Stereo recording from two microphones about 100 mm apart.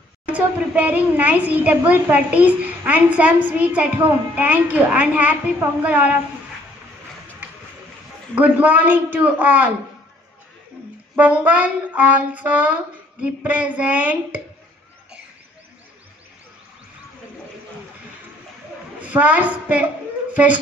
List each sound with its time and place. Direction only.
0.3 s a child's voice: 15° right (ahead or behind)
8.4 s a child's voice: 15° right (ahead or behind)
11.1 s a child's voice: 15° right (ahead or behind)
18.9 s a woman's voice: 15° right (ahead or behind)